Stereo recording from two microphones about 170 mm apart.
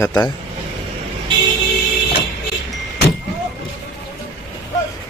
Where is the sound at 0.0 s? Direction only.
15° left (ahead or behind).